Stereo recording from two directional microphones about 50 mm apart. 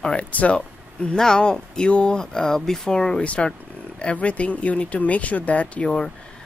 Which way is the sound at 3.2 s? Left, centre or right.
Left.